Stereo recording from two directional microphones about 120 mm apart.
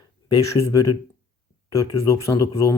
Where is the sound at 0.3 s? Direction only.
30° left (ahead or behind).